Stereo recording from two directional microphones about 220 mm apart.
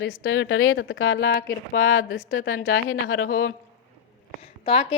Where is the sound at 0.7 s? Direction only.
55° left (ahead or behind).